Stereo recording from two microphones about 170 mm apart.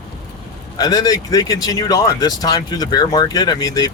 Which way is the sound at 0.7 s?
25° left (ahead or behind).